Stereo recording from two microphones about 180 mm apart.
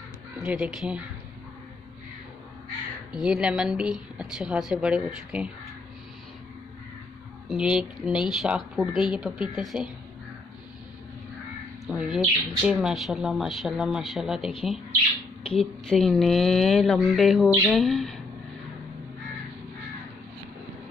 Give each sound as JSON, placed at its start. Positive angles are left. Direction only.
{"t": 0.4, "sound": "speech", "side_deg": -5}
{"t": 3.1, "sound": "speech", "side_deg": -5}
{"t": 7.4, "sound": "speech", "side_deg": -5}
{"t": 11.9, "sound": "speech", "side_deg": -5}